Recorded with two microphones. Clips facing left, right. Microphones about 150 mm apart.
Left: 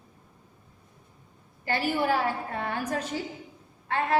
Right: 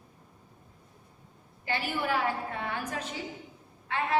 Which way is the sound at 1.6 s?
40° left (ahead or behind).